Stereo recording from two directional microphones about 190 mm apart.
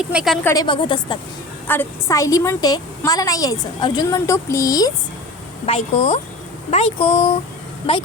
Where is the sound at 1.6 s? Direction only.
10° left (ahead or behind).